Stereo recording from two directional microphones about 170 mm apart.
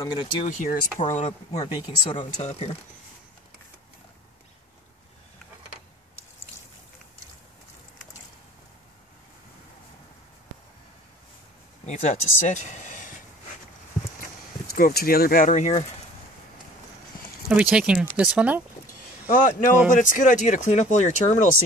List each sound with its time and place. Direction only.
0.0 s speech: 25° left (ahead or behind)
0.5 s speech: 45° left (ahead or behind)
1.6 s speech: 25° left (ahead or behind)
2.3 s speech: 40° left (ahead or behind)
11.8 s speech: 40° left (ahead or behind)
14.7 s speech: 60° left (ahead or behind)
17.5 s speech: 5° right (ahead or behind)
19.4 s speech: 50° left (ahead or behind)